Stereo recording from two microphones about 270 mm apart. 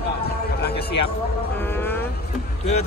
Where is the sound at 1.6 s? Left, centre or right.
Centre.